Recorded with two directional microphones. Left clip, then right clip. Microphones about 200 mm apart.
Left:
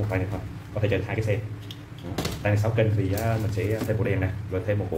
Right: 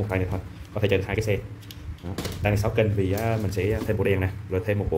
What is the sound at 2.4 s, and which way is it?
Speech, 50° right (ahead or behind).